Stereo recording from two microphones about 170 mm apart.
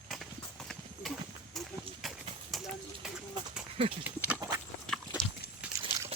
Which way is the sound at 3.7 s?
35° right (ahead or behind).